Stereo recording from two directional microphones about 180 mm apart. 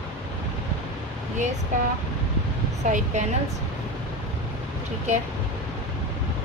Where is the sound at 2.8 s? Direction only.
45° right (ahead or behind).